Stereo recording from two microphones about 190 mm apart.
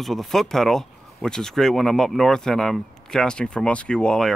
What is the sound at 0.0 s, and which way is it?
Speech, centre (ahead or behind).